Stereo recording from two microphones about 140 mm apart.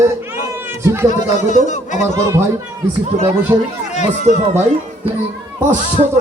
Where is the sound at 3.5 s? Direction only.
25° right (ahead or behind).